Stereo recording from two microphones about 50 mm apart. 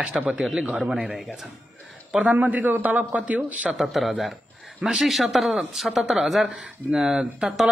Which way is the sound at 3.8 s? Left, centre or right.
Centre.